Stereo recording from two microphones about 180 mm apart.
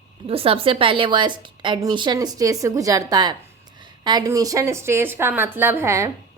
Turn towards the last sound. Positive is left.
turn(degrees=-15)  # may be behind; listen again after turning